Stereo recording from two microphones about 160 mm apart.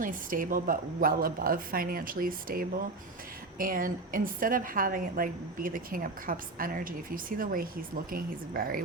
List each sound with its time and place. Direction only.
0.0 s a woman's voice: 60° right (ahead or behind)